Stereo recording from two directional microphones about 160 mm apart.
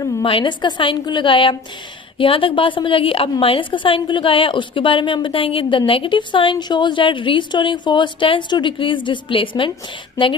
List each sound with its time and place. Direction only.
0.2 s a woman's voice: 35° left (ahead or behind)